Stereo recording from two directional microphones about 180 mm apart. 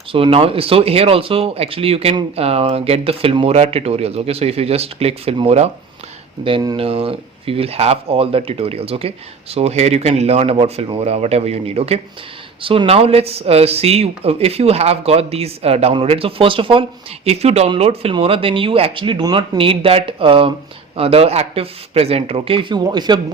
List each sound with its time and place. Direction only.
0.1 s speech: 30° right (ahead or behind)